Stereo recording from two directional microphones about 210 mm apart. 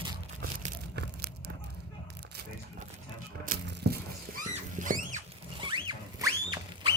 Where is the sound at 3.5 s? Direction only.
50° right (ahead or behind).